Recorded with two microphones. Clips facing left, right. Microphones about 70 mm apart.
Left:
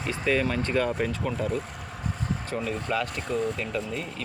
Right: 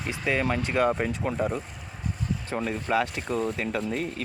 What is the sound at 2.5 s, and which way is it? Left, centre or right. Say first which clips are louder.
Speech: right 3 dB; right.